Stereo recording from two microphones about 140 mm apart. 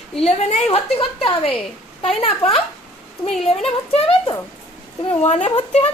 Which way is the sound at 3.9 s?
40° left (ahead or behind).